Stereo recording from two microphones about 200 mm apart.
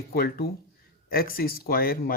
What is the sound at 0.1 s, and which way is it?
Speech, 50° left (ahead or behind).